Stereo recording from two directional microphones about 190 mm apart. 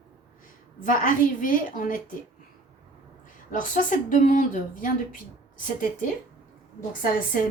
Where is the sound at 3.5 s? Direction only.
45° left (ahead or behind).